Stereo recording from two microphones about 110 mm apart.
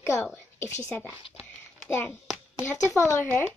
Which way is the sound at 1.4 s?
20° left (ahead or behind).